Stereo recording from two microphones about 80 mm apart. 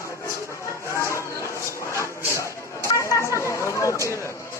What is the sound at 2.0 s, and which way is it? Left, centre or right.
Chatter, left.